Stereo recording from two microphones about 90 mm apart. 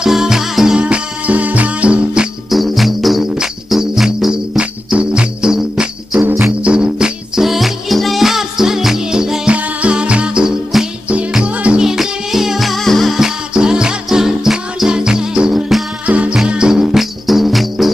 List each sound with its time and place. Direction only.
0.0 s music: 5° right (ahead or behind)
2.5 s music: centre (ahead or behind)
6.2 s music: 25° right (ahead or behind)
6.6 s music: 10° right (ahead or behind)